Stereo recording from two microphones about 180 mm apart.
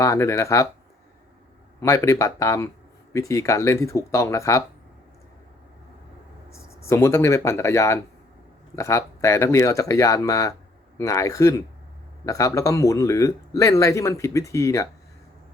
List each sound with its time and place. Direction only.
0.0 s speech: 15° left (ahead or behind)
1.8 s speech: 15° left (ahead or behind)
6.5 s speech: 15° left (ahead or behind)